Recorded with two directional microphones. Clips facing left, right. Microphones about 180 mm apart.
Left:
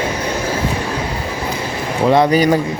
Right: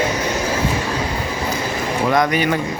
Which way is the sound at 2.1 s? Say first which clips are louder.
Left 6 dB; 30° left (ahead or behind).